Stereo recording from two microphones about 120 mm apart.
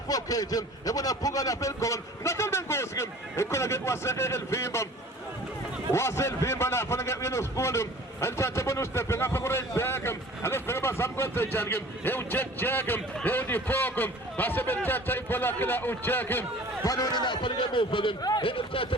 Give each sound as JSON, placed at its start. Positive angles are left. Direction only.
{"t": 0.1, "sound": "a man's voice", "side_deg": 30}
{"t": 5.9, "sound": "a man's voice", "side_deg": 25}
{"t": 16.8, "sound": "a man's voice", "side_deg": 30}
{"t": 18.4, "sound": "speech", "side_deg": 50}